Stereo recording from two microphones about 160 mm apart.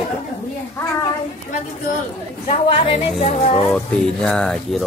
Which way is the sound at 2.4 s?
35° left (ahead or behind).